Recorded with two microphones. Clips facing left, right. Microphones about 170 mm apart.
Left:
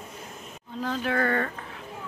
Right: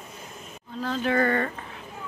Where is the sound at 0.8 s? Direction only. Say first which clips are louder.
Right 3 dB; 5° left (ahead or behind).